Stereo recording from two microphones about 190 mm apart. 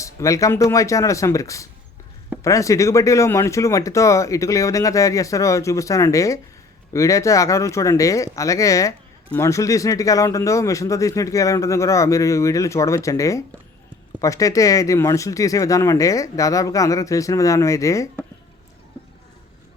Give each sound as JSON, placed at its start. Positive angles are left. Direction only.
{"t": 0.0, "sound": "speech", "side_deg": 15}